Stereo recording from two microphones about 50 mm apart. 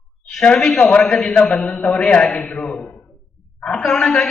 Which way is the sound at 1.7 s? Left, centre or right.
Left.